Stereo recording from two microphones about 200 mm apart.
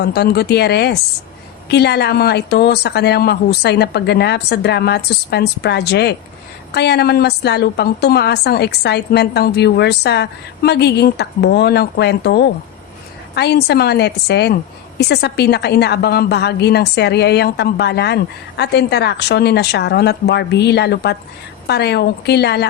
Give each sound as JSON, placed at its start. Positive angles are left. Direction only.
{"t": 0.0, "sound": "a woman's voice", "side_deg": 55}